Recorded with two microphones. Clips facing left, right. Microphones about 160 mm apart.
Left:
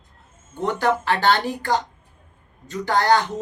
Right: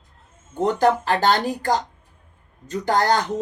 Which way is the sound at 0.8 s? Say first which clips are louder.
Right 1 dB; 45° right (ahead or behind).